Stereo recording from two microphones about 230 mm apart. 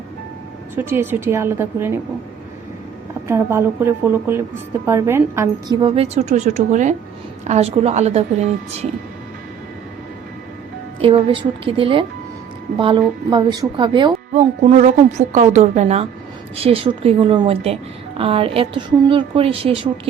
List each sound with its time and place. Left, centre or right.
0.8 s a woman's voice: centre
3.2 s a woman's voice: centre
5.8 s a woman's voice: right
11.0 s a woman's voice: right
14.3 s a woman's voice: right